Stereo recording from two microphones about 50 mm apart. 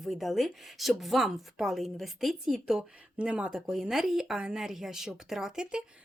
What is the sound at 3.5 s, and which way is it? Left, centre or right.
A woman's voice, centre.